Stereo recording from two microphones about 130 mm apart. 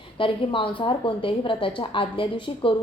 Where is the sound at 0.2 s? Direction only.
40° left (ahead or behind).